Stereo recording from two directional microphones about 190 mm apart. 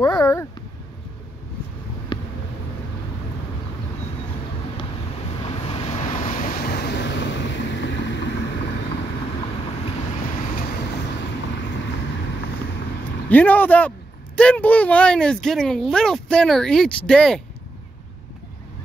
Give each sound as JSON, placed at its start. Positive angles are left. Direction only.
{"t": 0.0, "sound": "speech", "side_deg": 15}
{"t": 2.1, "sound": "vehicle", "side_deg": 25}
{"t": 5.4, "sound": "vehicle", "side_deg": 30}
{"t": 13.3, "sound": "speech", "side_deg": 10}